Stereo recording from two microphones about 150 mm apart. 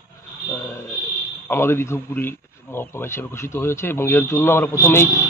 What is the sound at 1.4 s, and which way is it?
Speech, 15° left (ahead or behind).